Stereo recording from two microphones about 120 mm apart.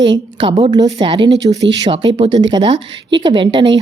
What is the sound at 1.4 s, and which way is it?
Speech, 35° right (ahead or behind).